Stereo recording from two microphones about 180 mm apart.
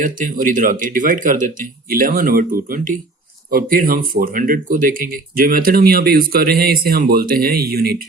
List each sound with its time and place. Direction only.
0.0 s speech: 50° right (ahead or behind)